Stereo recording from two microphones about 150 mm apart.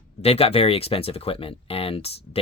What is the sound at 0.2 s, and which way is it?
Speech, 40° left (ahead or behind).